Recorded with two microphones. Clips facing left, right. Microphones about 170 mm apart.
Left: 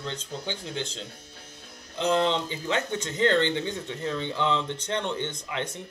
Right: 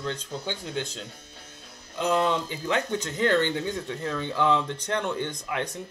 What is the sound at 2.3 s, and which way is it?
Speech, 20° left (ahead or behind).